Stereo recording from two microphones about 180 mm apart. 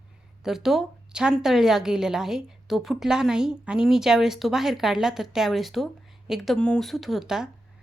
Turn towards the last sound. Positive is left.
turn(degrees=-5)  # may be behind; listen again after turning